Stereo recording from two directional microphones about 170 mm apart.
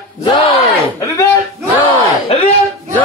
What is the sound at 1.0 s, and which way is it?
Speech, 20° left (ahead or behind).